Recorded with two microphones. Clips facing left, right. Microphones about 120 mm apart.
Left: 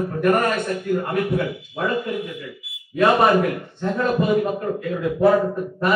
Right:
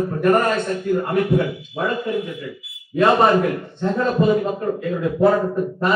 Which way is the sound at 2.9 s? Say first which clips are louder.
Right 1 dB; 30° right (ahead or behind).